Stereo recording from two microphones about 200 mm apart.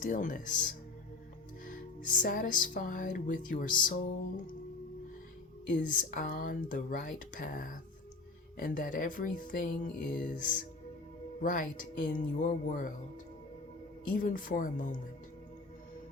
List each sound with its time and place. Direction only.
0.0 s music: 40° left (ahead or behind)
5.6 s music: 40° left (ahead or behind)
14.1 s music: 45° left (ahead or behind)